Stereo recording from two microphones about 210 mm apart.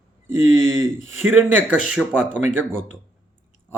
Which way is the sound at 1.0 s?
35° left (ahead or behind).